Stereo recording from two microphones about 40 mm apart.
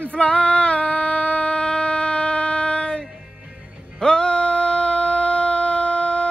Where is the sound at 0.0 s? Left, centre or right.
Left.